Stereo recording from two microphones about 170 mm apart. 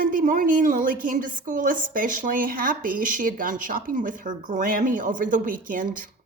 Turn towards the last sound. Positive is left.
turn(degrees=-55)  # may be behind; listen again after turning